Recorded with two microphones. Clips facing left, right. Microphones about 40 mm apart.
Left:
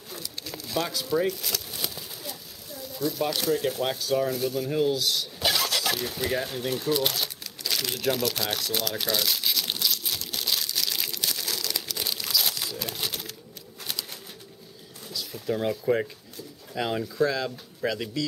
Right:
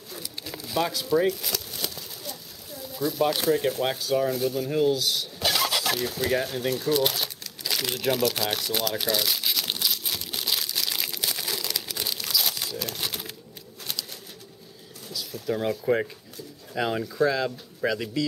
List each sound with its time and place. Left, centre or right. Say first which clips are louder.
0.2 s pigeon: right 2 dB; centre
1.7 s a sound: even; centre
2.9 s speech: right 3 dB; centre
6.8 s crumpling: right 1 dB; centre
12.0 s crumpling: even; centre
15.4 s speech: even; centre